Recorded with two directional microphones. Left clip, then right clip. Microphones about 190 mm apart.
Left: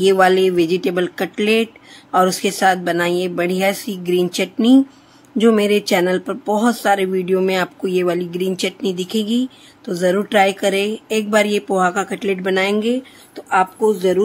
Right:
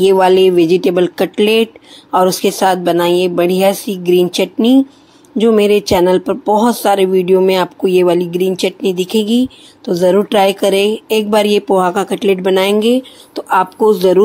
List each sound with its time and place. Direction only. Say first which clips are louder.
0.0 s a woman's voice: right 4 dB; 10° right (ahead or behind)